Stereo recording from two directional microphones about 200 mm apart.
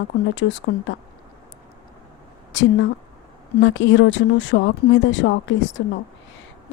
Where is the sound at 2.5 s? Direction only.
65° left (ahead or behind).